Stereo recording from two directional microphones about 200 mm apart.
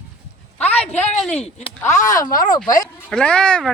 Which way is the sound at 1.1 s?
5° left (ahead or behind).